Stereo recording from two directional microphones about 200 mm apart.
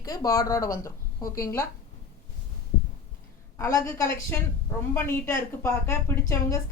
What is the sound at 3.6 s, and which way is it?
A woman's voice, 15° left (ahead or behind).